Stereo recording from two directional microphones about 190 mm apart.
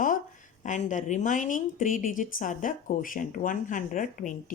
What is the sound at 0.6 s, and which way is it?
Speech, 40° left (ahead or behind).